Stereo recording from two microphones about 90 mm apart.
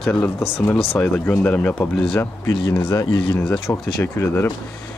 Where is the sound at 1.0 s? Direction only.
15° left (ahead or behind).